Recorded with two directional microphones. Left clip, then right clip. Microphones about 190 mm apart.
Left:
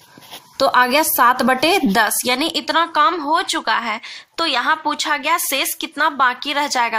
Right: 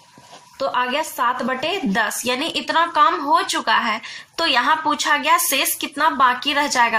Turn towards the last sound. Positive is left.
turn(degrees=45)  # may be behind; listen again after turning